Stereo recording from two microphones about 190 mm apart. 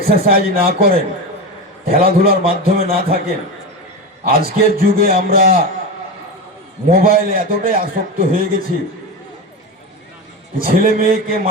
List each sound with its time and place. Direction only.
0.0 s a man's voice: 50° right (ahead or behind)
4.3 s a man's voice: 50° right (ahead or behind)
6.9 s a man's voice: 50° right (ahead or behind)
10.6 s a man's voice: 50° right (ahead or behind)